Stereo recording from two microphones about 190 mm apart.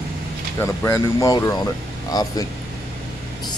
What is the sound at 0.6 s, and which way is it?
Speech, 15° left (ahead or behind).